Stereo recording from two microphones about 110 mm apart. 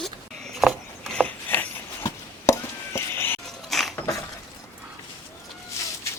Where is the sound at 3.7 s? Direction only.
Centre (ahead or behind).